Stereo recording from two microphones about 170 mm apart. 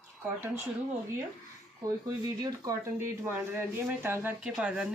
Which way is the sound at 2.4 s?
20° right (ahead or behind).